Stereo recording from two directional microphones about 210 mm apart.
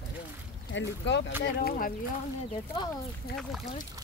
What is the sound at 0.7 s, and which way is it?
Speech, 60° left (ahead or behind).